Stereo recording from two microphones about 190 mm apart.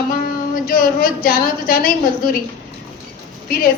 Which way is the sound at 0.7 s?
50° left (ahead or behind).